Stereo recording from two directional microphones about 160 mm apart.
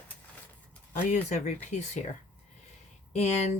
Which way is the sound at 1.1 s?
50° left (ahead or behind).